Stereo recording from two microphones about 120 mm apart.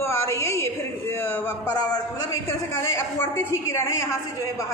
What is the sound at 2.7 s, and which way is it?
A woman's voice, 20° left (ahead or behind).